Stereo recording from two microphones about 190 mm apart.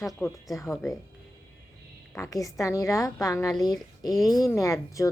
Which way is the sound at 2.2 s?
15° left (ahead or behind).